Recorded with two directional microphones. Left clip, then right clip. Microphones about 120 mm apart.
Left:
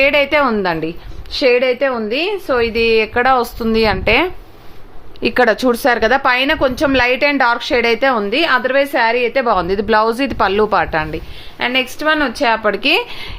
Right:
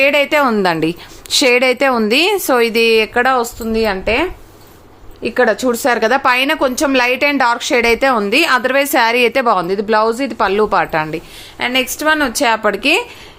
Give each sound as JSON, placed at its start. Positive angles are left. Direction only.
{"t": 0.0, "sound": "a woman's voice", "side_deg": -10}
{"t": 0.4, "sound": "a woman's voice", "side_deg": -30}
{"t": 0.7, "sound": "a woman's voice", "side_deg": -50}
{"t": 2.7, "sound": "speech", "side_deg": -30}
{"t": 3.4, "sound": "a woman's voice", "side_deg": 25}
{"t": 5.7, "sound": "a woman's voice", "side_deg": 0}
{"t": 8.6, "sound": "a woman's voice", "side_deg": -50}
{"t": 9.6, "sound": "a woman's voice", "side_deg": 5}